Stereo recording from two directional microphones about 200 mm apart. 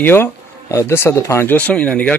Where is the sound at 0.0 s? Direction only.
10° left (ahead or behind).